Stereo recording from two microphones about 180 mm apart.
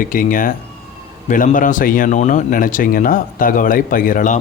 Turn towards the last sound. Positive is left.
turn(degrees=45)  # may be behind; listen again after turning